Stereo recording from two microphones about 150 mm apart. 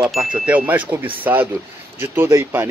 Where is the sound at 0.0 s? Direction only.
5° right (ahead or behind).